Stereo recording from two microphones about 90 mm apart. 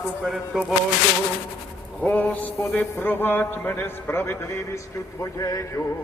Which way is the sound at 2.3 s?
20° left (ahead or behind).